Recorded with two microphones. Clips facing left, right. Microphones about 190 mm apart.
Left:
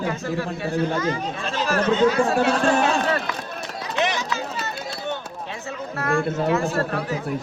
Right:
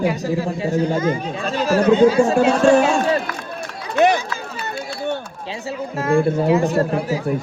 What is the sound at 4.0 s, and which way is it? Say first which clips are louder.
Run: right 8 dB; 55° right (ahead or behind).